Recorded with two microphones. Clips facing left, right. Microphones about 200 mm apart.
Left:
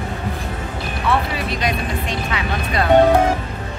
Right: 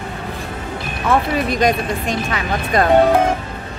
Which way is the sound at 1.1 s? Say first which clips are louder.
Right 4 dB; 45° right (ahead or behind).